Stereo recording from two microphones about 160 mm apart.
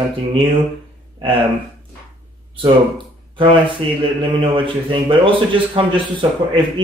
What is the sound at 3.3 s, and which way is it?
A man's voice, 30° right (ahead or behind).